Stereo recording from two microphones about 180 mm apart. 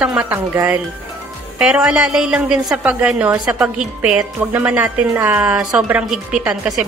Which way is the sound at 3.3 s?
20° right (ahead or behind).